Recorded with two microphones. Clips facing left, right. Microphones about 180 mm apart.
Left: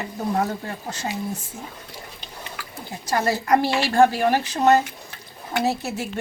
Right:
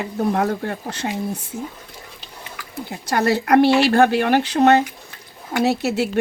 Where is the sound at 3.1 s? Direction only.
65° right (ahead or behind).